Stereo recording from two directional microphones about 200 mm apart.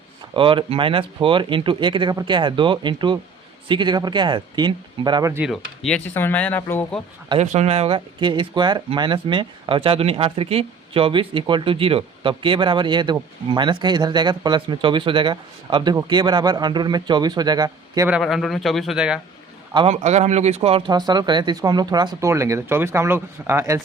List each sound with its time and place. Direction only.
0.3 s speech: 25° right (ahead or behind)
5.5 s speech: 5° left (ahead or behind)
7.3 s speech: 30° right (ahead or behind)
18.1 s speech: centre (ahead or behind)
19.7 s speech: 30° right (ahead or behind); by 23.8 s 15° right (ahead or behind)